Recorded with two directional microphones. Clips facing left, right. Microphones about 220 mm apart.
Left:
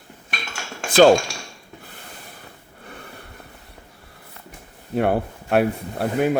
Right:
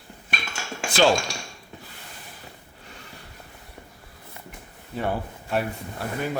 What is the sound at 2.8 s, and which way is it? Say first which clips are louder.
Snort: left 7 dB; 55° left (ahead or behind).